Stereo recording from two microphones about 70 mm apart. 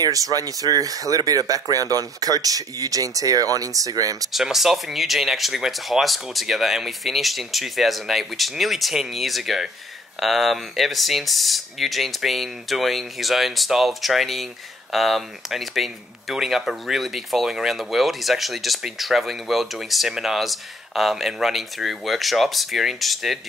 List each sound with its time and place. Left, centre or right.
0.0 s speech: right
4.3 s speech: centre